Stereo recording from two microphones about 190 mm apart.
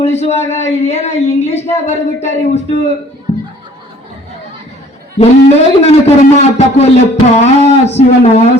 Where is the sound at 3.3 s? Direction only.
35° left (ahead or behind).